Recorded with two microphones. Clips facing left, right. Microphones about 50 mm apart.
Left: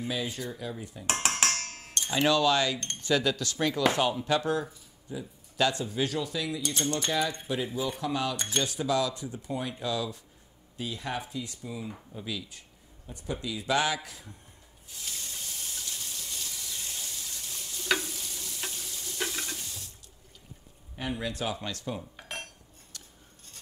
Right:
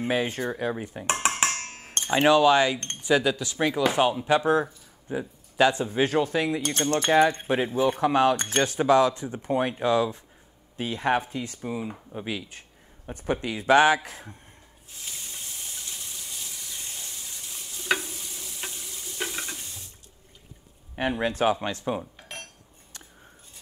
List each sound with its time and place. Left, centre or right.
0.0 s speech: right
1.1 s music: centre
2.0 s music: right
2.2 s speech: right
5.1 s speech: right
5.6 s speech: right
14.9 s water: right
20.9 s speech: right
22.1 s cutlery: centre